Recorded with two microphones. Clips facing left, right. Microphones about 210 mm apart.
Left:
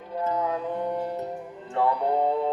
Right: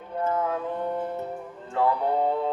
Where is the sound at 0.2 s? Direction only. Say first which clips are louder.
Right 1 dB; 15° left (ahead or behind).